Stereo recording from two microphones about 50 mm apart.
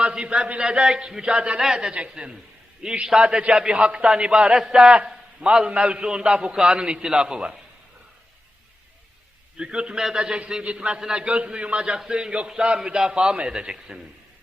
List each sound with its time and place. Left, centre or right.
0.0 s a man's voice: centre
9.6 s a man's voice: centre
10.8 s a man's voice: centre